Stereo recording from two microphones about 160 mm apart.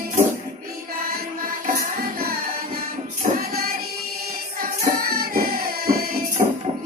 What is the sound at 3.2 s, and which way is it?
Music, 45° right (ahead or behind).